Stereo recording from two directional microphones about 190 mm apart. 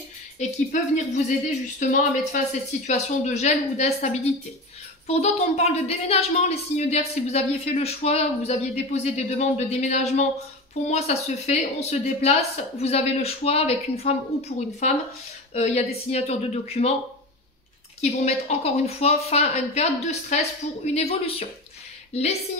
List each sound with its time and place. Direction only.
0.4 s a woman's voice: 40° left (ahead or behind)
18.0 s a woman's voice: 35° left (ahead or behind)